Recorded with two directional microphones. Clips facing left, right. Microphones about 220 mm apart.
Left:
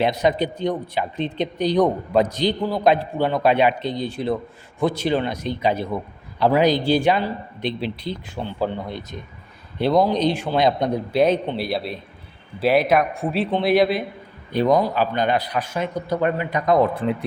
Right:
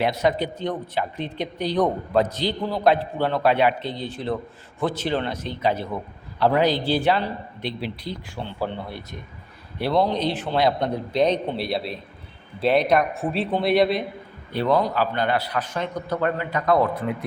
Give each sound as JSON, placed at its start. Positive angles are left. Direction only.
{"t": 0.0, "sound": "a man's voice", "side_deg": 15}
{"t": 14.5, "sound": "speech", "side_deg": 15}
{"t": 16.9, "sound": "speech", "side_deg": 30}